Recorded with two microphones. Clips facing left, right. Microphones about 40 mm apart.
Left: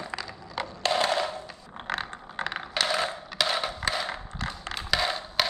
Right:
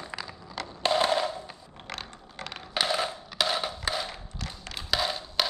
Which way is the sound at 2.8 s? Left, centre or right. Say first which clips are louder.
Left 1 dB; centre.